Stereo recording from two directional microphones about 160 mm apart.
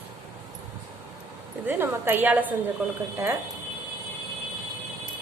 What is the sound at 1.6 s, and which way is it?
Speech, 10° right (ahead or behind).